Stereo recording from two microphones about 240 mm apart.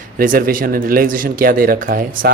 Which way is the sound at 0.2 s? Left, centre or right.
Right.